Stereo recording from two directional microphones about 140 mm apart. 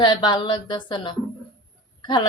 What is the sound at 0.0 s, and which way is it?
Speech, 30° left (ahead or behind).